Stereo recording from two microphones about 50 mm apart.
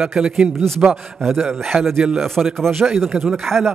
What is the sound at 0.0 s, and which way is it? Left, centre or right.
Speech, centre.